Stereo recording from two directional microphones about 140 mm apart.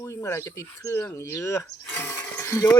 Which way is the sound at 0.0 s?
20° left (ahead or behind).